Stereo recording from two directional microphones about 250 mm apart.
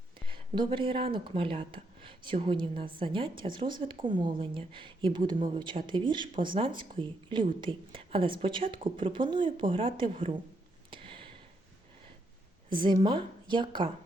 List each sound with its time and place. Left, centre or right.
0.3 s speech: centre
10.9 s a sound: centre
12.7 s speech: centre